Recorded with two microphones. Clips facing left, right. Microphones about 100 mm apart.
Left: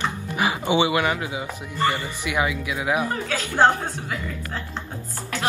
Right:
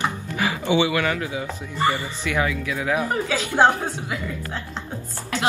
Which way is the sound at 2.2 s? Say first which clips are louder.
Even; 15° left (ahead or behind).